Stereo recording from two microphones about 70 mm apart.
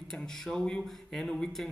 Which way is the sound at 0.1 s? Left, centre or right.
Centre.